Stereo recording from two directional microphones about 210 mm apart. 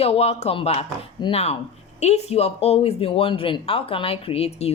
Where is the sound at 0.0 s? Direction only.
30° left (ahead or behind).